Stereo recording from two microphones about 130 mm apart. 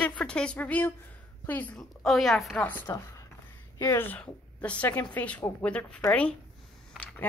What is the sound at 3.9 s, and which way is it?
A woman's voice, 15° left (ahead or behind).